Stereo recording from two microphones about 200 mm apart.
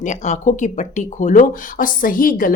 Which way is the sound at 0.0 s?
35° left (ahead or behind).